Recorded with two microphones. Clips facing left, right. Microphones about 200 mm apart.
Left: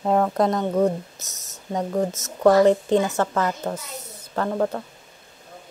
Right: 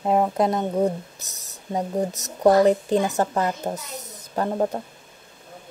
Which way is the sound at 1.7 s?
35° right (ahead or behind).